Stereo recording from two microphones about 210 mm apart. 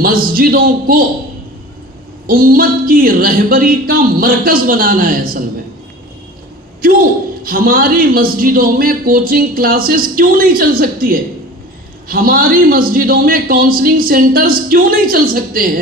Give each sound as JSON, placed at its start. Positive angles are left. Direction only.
{"t": 0.0, "sound": "speech", "side_deg": -45}
{"t": 2.2, "sound": "speech", "side_deg": -45}
{"t": 7.4, "sound": "speech", "side_deg": -45}